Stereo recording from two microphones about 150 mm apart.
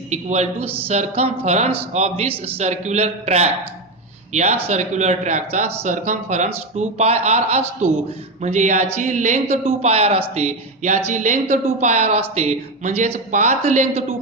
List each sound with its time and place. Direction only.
0.1 s speech: 50° right (ahead or behind)